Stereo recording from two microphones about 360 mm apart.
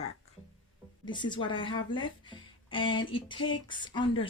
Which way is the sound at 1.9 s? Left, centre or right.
Centre.